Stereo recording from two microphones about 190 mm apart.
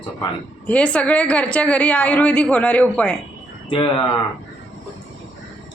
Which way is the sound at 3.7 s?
25° left (ahead or behind).